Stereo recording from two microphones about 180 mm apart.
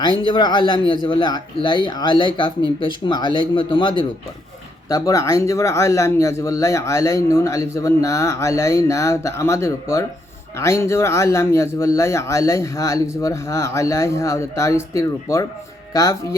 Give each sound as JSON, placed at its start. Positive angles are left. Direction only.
{"t": 0.3, "sound": "speech", "side_deg": 25}